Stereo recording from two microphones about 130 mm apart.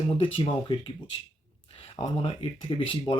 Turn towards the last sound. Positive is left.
turn(degrees=40)  # may be behind; listen again after turning